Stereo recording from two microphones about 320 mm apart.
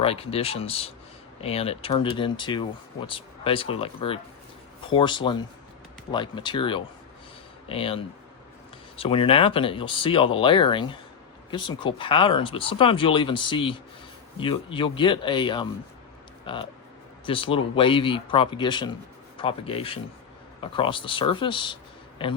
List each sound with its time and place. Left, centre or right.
0.0 s speech: centre